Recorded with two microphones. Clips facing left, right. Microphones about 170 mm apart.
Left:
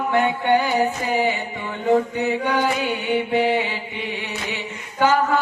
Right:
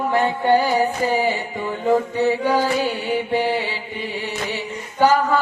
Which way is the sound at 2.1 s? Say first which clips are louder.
Right 3 dB; 30° right (ahead or behind).